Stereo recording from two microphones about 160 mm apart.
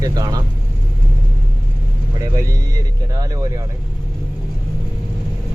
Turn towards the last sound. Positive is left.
turn(degrees=-25)  # may be behind; listen again after turning